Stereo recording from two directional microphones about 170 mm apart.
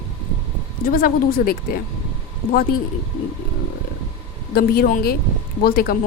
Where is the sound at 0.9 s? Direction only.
55° left (ahead or behind).